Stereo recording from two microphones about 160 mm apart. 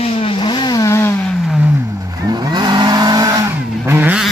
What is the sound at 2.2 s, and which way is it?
Vehicle, 25° right (ahead or behind).